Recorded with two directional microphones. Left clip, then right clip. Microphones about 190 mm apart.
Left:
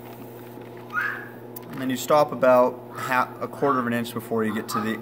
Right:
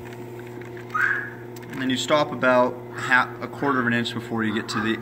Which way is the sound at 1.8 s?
55° left (ahead or behind).